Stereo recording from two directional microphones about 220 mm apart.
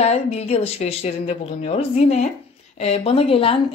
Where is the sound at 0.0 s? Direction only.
30° left (ahead or behind).